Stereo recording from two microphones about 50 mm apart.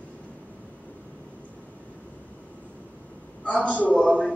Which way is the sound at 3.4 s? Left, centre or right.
Left.